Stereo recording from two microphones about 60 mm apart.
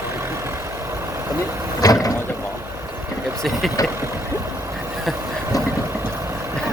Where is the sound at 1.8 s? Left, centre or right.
Left.